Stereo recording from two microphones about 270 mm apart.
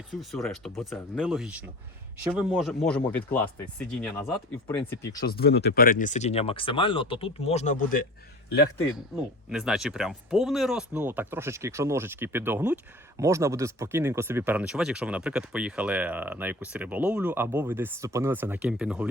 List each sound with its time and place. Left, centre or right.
0.1 s speech: centre
5.2 s speech: left
9.5 s speech: centre